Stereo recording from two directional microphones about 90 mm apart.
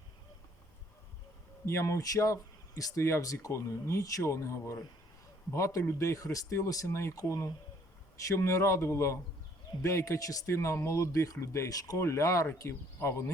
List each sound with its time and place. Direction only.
1.6 s speech: 35° left (ahead or behind)